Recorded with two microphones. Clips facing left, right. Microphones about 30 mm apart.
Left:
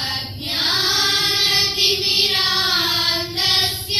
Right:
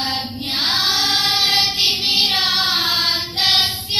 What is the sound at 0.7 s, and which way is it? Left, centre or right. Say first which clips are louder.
Music: right 1 dB; right.